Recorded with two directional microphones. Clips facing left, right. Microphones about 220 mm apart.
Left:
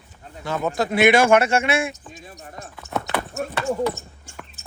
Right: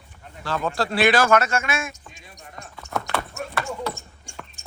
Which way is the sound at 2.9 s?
25° left (ahead or behind).